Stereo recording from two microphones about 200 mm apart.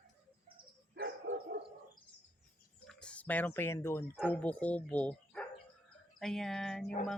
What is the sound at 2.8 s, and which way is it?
Speech, 5° left (ahead or behind).